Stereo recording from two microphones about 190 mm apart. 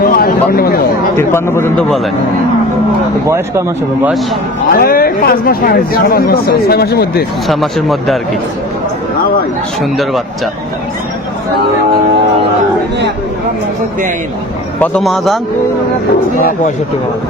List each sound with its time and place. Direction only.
0.0 s a sound: 50° left (ahead or behind)
1.1 s speech: 15° left (ahead or behind)
3.2 s speech: 15° right (ahead or behind)
4.7 s speech: 50° left (ahead or behind)
7.4 s speech: centre (ahead or behind)
14.8 s speech: 5° left (ahead or behind)
16.4 s speech: 45° left (ahead or behind)